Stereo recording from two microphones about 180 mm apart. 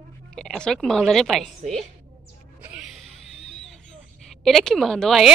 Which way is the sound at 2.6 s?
5° right (ahead or behind).